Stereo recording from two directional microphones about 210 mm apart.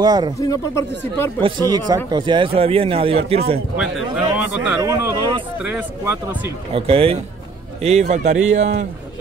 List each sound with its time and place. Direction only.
0.0 s a man's voice: 20° right (ahead or behind)
0.4 s speech: 15° left (ahead or behind)
1.4 s a man's voice: 20° right (ahead or behind)
4.4 s speech: 5° right (ahead or behind)
6.7 s a man's voice: 25° right (ahead or behind)